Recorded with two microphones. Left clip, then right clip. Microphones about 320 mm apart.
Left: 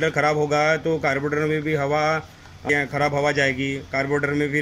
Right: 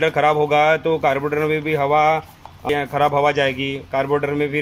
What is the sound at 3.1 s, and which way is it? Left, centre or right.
Speech, right.